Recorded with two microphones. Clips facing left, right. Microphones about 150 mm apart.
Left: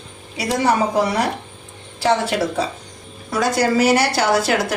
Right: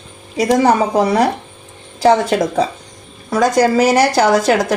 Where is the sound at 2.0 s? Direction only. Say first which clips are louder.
Right 6 dB; 40° right (ahead or behind).